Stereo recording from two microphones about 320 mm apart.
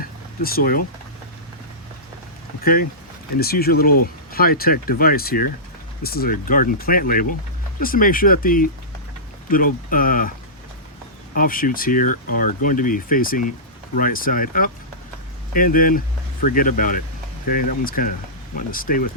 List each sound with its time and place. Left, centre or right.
0.0 s a sound: left
3.3 s speech: left
11.3 s speech: left